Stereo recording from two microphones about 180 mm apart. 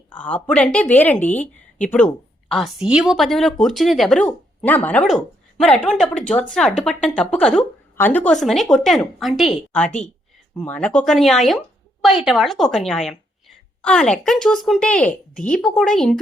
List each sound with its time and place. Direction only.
0.1 s a woman's voice: 5° left (ahead or behind)
2.5 s a woman's voice: centre (ahead or behind)